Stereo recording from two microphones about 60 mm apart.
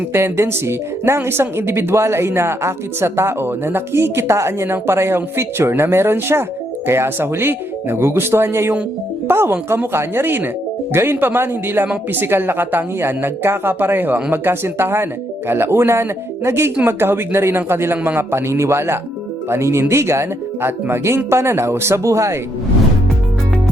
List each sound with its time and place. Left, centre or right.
0.1 s speech: right